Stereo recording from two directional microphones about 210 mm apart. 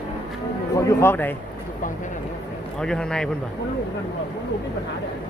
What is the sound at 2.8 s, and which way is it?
Speech, 5° left (ahead or behind).